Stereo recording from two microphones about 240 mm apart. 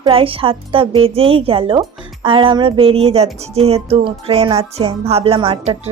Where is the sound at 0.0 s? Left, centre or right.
Right.